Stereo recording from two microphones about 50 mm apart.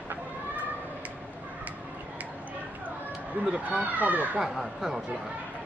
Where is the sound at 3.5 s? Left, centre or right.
Right.